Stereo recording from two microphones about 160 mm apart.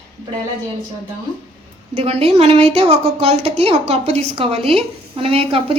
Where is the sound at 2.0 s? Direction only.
40° right (ahead or behind).